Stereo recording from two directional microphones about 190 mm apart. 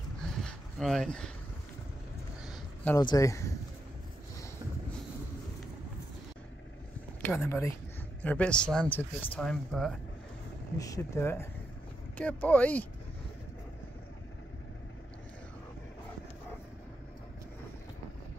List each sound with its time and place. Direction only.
0.2 s a sound: centre (ahead or behind)
3.0 s speech: 20° left (ahead or behind)
7.2 s speech: 10° left (ahead or behind)
10.8 s speech: 15° left (ahead or behind)